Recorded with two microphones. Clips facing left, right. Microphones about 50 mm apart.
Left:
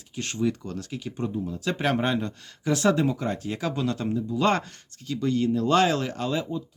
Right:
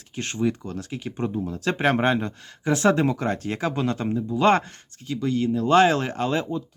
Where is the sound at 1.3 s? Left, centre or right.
Right.